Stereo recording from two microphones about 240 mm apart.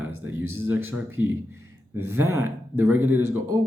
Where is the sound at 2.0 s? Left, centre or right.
Centre.